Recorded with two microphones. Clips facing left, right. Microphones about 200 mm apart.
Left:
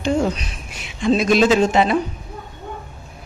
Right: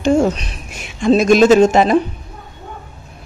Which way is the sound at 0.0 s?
45° right (ahead or behind).